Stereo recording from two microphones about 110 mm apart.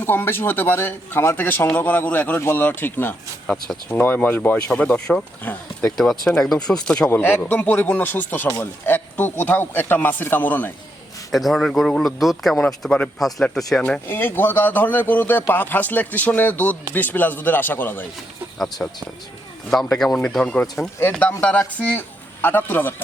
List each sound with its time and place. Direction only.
0.0 s a man's voice: 20° left (ahead or behind)
11.3 s a man's voice: centre (ahead or behind)
13.8 s speech: 15° left (ahead or behind)
19.7 s speech: 5° left (ahead or behind)